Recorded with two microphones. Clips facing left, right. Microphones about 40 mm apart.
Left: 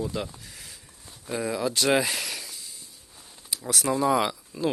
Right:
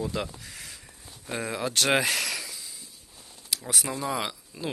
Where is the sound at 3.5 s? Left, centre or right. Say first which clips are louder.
Right 2 dB; right.